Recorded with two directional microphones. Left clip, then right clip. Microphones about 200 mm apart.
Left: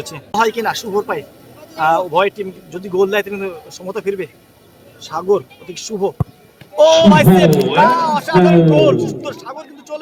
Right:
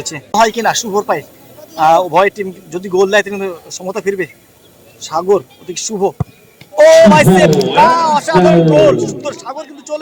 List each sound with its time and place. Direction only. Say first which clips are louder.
0.0 s speech: right 4 dB; 35° right (ahead or behind)